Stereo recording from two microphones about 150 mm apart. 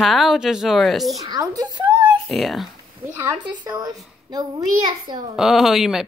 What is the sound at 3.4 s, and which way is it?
A child's voice, 30° right (ahead or behind).